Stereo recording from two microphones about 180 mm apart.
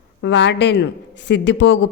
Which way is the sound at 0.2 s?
90° left.